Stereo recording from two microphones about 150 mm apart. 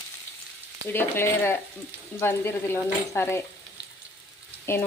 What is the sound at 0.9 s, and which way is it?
A woman's voice, 15° left (ahead or behind).